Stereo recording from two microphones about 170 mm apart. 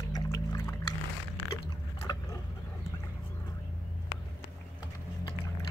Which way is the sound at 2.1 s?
25° left (ahead or behind).